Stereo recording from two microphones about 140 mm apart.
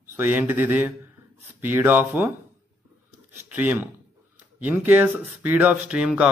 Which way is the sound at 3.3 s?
15° right (ahead or behind).